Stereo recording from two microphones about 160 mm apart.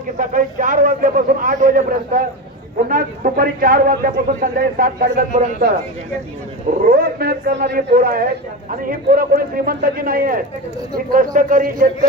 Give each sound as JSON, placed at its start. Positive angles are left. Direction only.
{"t": 0.2, "sound": "a man's voice", "side_deg": -55}
{"t": 6.9, "sound": "a man's voice", "side_deg": -70}